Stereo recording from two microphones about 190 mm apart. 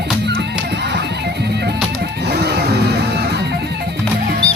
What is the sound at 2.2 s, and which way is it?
Music, 60° right (ahead or behind).